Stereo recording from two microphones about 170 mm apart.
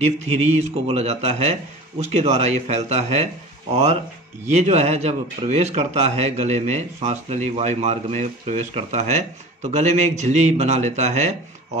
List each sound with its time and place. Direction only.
0.7 s speech: 40° right (ahead or behind)